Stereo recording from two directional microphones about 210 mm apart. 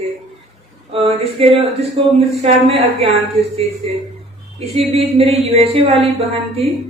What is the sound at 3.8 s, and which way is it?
A woman's voice, 25° right (ahead or behind).